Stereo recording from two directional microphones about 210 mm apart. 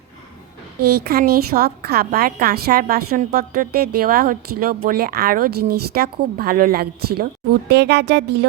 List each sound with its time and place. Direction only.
0.9 s a woman's voice: 45° right (ahead or behind)